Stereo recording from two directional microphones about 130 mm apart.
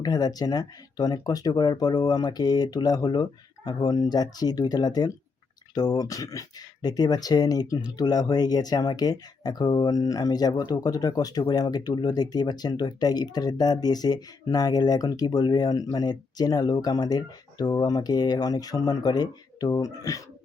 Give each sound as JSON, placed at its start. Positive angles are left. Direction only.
{"t": 0.0, "sound": "speech", "side_deg": 30}